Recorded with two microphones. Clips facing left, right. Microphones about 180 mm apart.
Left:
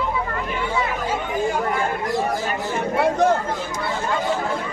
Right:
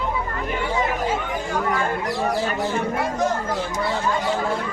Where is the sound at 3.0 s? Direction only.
65° left (ahead or behind).